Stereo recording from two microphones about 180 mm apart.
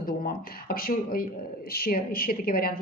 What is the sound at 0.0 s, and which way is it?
A woman's voice, 55° left (ahead or behind).